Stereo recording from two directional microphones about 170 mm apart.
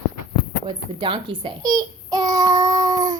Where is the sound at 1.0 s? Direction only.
30° right (ahead or behind).